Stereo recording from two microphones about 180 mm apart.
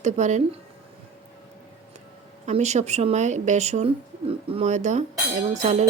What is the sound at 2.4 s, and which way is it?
A woman's voice, 40° right (ahead or behind).